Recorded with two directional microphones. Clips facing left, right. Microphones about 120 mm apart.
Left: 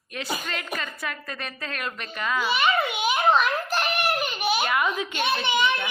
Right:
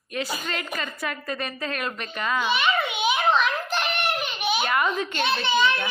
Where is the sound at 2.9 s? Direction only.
45° left (ahead or behind).